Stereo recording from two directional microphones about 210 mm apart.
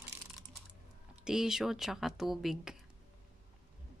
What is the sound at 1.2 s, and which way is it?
Speech, 5° right (ahead or behind).